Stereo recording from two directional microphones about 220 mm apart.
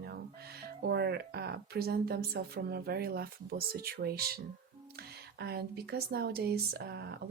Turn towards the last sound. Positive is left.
turn(degrees=-45)  # may be behind; listen again after turning